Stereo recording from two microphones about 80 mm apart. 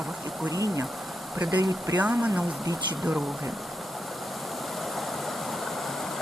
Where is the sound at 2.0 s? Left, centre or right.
Right.